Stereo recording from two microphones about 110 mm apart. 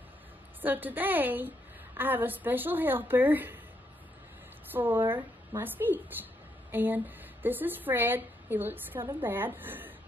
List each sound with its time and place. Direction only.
0.6 s a woman's voice: 15° right (ahead or behind)
4.6 s a woman's voice: 20° right (ahead or behind)